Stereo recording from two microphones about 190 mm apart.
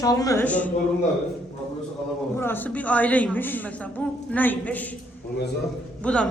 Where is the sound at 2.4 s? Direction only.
10° left (ahead or behind).